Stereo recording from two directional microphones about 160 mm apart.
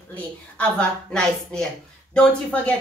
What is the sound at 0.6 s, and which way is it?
Speech, 5° left (ahead or behind).